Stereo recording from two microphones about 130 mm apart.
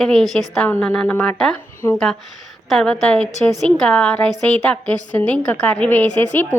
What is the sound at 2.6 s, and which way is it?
A woman's voice, 5° left (ahead or behind).